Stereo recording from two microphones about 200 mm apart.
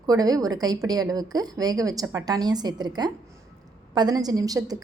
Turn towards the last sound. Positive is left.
turn(degrees=-20)  # may be behind; listen again after turning